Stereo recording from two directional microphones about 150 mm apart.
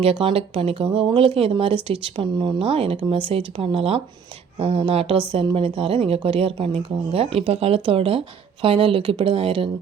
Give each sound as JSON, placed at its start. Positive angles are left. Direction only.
{"t": 0.0, "sound": "speech", "side_deg": -35}